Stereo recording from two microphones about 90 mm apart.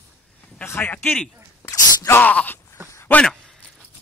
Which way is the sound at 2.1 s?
20° left (ahead or behind).